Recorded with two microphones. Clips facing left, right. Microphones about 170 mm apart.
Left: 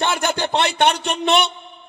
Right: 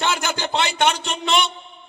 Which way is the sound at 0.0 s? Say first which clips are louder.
Left 3 dB; 55° left (ahead or behind).